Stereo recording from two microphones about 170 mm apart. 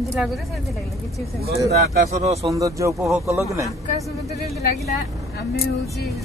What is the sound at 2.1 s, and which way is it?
Speech, 40° right (ahead or behind).